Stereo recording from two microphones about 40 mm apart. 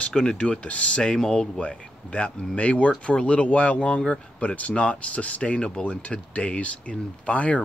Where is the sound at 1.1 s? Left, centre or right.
Centre.